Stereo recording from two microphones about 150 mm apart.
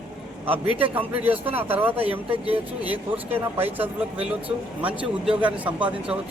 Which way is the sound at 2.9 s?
10° right (ahead or behind).